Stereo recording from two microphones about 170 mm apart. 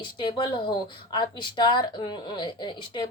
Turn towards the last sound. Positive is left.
turn(degrees=25)  # may be behind; listen again after turning